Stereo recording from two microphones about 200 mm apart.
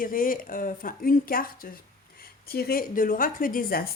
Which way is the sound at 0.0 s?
45° left (ahead or behind).